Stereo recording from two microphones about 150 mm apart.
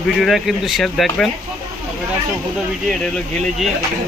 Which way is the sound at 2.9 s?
Centre (ahead or behind).